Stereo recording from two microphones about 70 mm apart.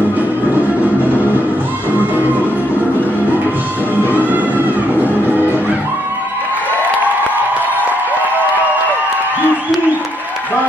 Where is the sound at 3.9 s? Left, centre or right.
Right.